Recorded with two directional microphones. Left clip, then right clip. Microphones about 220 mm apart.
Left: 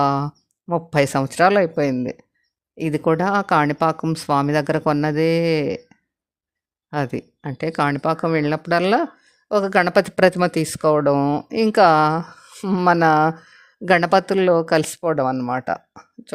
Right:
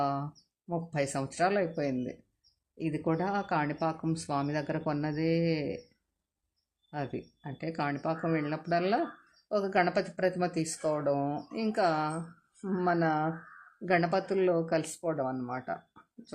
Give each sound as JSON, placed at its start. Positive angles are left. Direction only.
{"t": 0.0, "sound": "a sound", "side_deg": 50}
{"t": 0.7, "sound": "speech", "side_deg": 45}
{"t": 6.9, "sound": "speech", "side_deg": 50}